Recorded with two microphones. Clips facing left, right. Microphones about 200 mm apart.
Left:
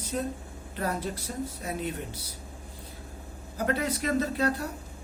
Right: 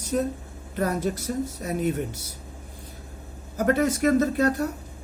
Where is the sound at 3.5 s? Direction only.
45° right (ahead or behind).